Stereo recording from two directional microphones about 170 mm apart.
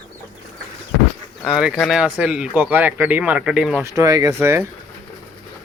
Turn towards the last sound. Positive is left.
turn(degrees=-15)  # may be behind; listen again after turning